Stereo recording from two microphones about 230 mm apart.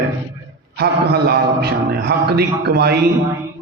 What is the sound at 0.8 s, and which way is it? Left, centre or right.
A man's voice, right.